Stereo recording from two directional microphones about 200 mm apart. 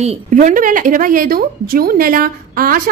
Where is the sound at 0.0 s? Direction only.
35° right (ahead or behind).